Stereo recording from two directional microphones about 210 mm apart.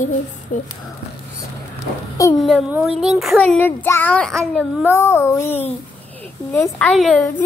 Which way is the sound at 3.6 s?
10° left (ahead or behind).